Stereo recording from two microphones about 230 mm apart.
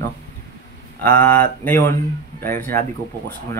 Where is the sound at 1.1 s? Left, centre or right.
Centre.